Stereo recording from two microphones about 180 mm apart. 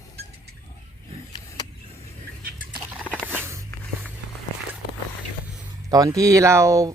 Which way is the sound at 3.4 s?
15° right (ahead or behind).